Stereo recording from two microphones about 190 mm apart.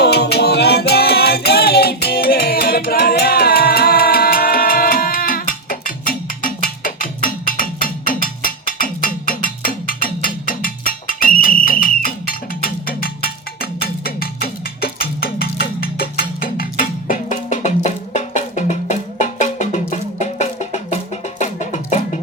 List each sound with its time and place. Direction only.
0.0 s music: 60° left (ahead or behind); by 22.2 s 40° left (ahead or behind)